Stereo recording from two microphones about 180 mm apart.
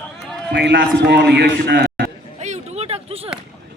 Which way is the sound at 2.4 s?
40° right (ahead or behind).